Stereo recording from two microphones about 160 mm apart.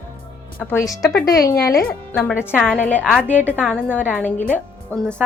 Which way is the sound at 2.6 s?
10° left (ahead or behind).